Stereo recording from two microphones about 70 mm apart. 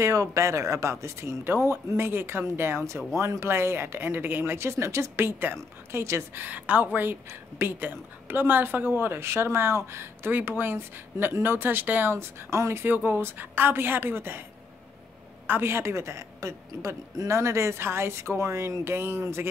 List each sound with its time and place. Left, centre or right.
0.0 s speech: right
6.4 s speech: right
12.8 s speech: right
15.4 s speech: right